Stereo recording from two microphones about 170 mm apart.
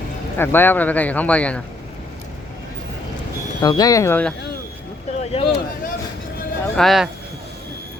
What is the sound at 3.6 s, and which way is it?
Speech, 20° left (ahead or behind).